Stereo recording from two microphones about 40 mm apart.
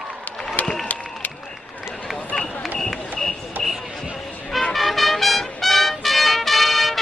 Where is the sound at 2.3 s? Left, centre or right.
Left.